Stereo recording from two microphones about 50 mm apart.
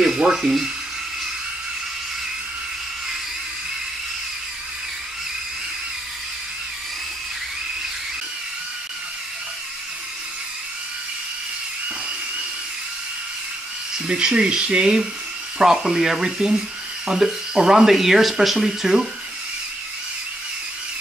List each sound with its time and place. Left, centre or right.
0.0 s speech: centre
13.9 s speech: centre